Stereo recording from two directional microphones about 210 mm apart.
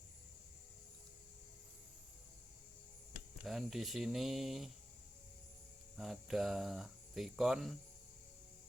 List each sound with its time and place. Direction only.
3.4 s speech: centre (ahead or behind)
6.0 s speech: centre (ahead or behind)